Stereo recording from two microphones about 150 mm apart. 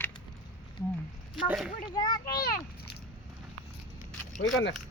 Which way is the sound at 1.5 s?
5° right (ahead or behind).